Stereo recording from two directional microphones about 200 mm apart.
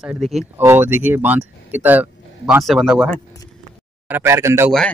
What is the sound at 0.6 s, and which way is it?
Speech, 10° right (ahead or behind).